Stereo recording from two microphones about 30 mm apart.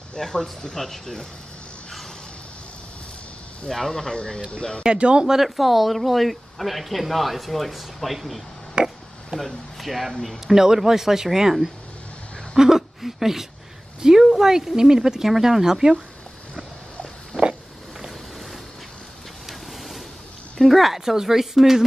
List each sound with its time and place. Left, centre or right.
0.2 s speech: left
3.7 s speech: centre
4.8 s speech: right
5.4 s speech: centre
8.8 s speech: right
9.8 s speech: centre
10.4 s speech: centre
17.3 s a sound: left
20.5 s speech: centre
21.0 s speech: centre